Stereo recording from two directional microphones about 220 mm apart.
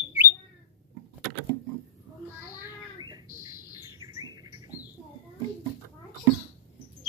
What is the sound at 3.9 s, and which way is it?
Bird, 15° right (ahead or behind).